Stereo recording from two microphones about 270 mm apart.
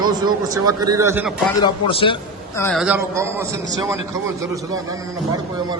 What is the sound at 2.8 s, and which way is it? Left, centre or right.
A man's voice, centre.